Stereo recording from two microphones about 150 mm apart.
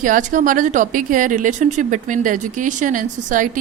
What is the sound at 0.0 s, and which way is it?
A woman's voice, 60° right (ahead or behind).